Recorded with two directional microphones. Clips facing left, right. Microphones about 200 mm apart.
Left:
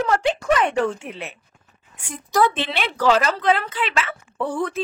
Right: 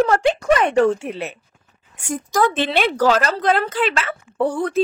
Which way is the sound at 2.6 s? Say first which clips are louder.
Right 6 dB; 45° right (ahead or behind).